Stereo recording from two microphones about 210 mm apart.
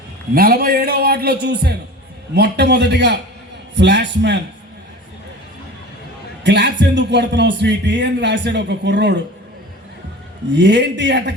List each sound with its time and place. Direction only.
0.3 s a man's voice: 45° right (ahead or behind)
6.4 s a man's voice: 55° right (ahead or behind)
10.5 s a man's voice: 55° right (ahead or behind)